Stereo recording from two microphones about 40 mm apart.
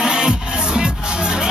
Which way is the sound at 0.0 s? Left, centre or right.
Centre.